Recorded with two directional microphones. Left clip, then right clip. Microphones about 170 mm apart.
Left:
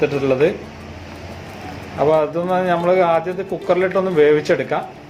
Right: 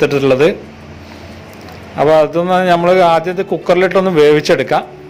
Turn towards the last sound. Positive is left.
turn(degrees=-60)  # may be behind; listen again after turning